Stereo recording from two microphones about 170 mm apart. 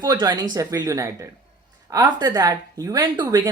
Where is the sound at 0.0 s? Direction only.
25° right (ahead or behind).